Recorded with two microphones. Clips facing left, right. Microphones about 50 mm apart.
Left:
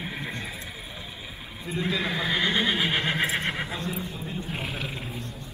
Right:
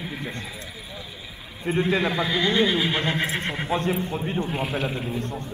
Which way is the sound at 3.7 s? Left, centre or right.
Right.